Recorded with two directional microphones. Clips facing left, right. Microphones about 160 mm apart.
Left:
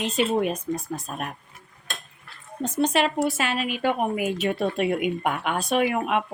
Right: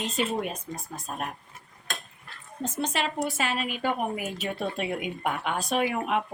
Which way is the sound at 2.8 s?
65° left (ahead or behind).